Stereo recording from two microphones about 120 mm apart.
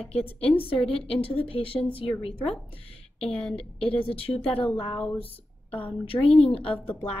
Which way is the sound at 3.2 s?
5° left (ahead or behind).